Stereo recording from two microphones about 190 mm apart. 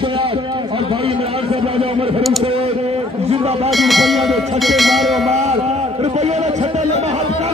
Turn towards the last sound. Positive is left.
turn(degrees=-35)  # may be behind; listen again after turning